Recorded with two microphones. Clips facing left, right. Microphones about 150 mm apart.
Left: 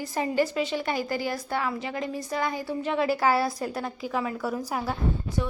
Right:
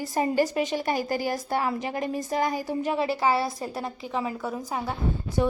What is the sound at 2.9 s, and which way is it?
Speech, 30° right (ahead or behind).